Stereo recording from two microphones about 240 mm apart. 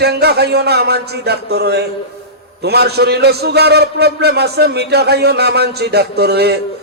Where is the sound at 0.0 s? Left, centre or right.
Right.